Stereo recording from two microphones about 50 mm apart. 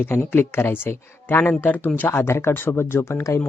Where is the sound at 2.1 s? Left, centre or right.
Left.